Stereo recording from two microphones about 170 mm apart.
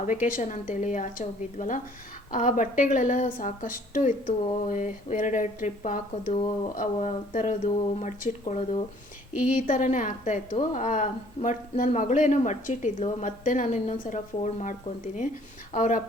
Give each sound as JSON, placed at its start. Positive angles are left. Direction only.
{"t": 0.2, "sound": "a woman's voice", "side_deg": 50}